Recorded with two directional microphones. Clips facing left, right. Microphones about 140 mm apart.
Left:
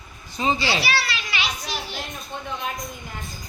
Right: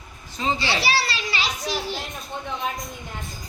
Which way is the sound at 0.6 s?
25° right (ahead or behind).